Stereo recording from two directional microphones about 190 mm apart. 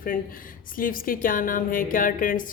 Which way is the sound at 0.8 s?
45° left (ahead or behind).